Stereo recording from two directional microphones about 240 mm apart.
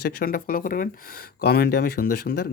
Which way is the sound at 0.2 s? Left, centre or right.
Left.